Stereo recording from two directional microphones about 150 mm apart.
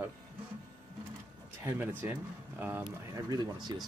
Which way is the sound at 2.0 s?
15° right (ahead or behind).